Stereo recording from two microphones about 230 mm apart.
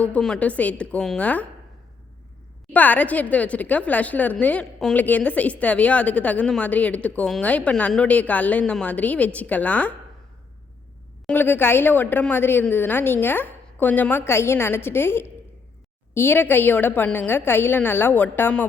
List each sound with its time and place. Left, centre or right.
0.0 s a woman's voice: centre
2.7 s a woman's voice: centre
11.3 s a woman's voice: centre